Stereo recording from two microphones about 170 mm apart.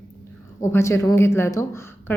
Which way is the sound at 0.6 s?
15° left (ahead or behind).